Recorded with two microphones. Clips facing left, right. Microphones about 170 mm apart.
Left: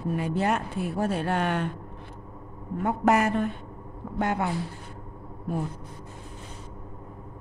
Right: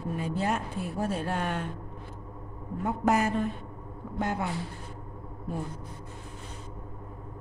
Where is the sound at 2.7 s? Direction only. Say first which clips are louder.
Left 3 dB; 65° left (ahead or behind).